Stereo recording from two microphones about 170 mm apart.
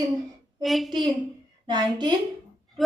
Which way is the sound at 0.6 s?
Centre (ahead or behind).